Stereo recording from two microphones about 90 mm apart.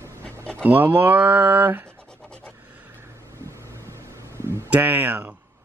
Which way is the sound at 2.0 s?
10° left (ahead or behind).